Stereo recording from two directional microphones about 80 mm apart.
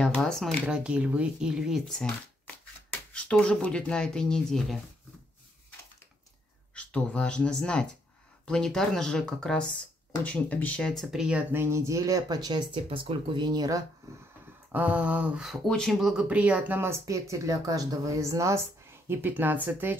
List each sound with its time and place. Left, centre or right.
0.0 s speech: centre
0.7 s speech: centre
1.9 s speech: centre
6.7 s speech: centre
11.1 s speech: centre
11.5 s speech: right
14.7 s speech: centre
15.4 s speech: centre
17.0 s speech: right
19.0 s speech: right